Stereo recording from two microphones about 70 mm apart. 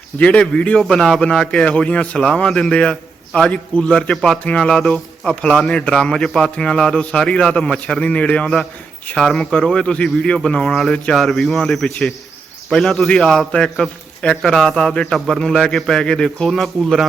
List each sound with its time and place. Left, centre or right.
0.2 s a man's voice: centre
0.8 s a man's voice: centre